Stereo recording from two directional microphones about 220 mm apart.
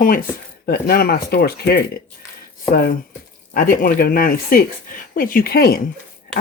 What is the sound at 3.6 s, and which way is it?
Speech, 40° left (ahead or behind).